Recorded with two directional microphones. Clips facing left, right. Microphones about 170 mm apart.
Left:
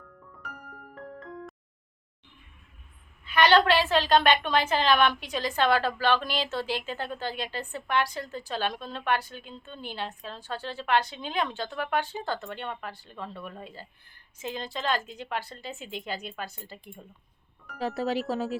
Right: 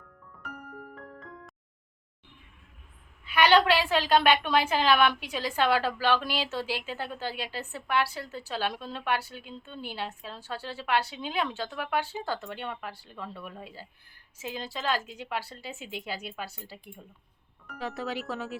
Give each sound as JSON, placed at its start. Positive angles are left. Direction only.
{"t": 3.2, "sound": "a woman's voice", "side_deg": -10}
{"t": 17.7, "sound": "speech", "side_deg": 35}